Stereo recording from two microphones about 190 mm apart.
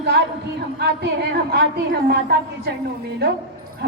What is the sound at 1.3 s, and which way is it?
Speech, 55° right (ahead or behind).